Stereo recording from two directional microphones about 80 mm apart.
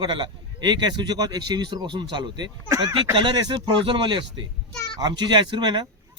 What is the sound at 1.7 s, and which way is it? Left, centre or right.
Speech, right.